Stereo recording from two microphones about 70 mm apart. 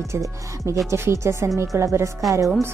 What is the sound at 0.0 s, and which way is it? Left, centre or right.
Speech, right.